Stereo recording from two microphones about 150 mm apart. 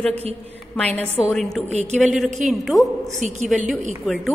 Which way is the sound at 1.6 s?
45° right (ahead or behind).